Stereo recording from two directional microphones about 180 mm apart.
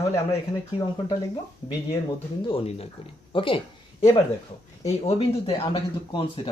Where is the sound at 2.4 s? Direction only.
30° left (ahead or behind).